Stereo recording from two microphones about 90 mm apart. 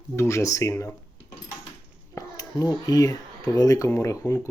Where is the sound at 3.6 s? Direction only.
40° left (ahead or behind).